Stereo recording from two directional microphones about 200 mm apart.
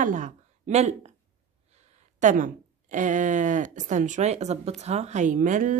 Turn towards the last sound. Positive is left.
turn(degrees=-40)  # may be behind; listen again after turning